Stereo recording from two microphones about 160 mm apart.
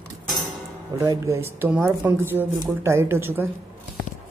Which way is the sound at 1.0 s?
15° right (ahead or behind).